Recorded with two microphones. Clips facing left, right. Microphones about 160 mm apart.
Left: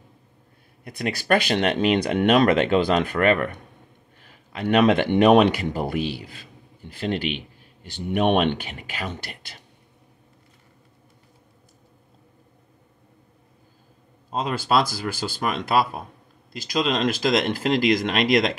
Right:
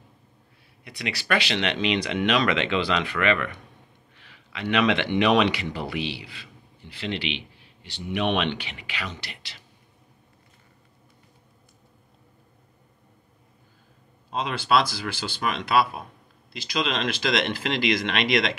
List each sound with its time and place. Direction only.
0.8 s speech: 50° left (ahead or behind)
14.3 s speech: 45° left (ahead or behind)